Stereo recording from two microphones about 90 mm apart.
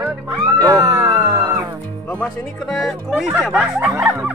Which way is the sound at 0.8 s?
45° right (ahead or behind).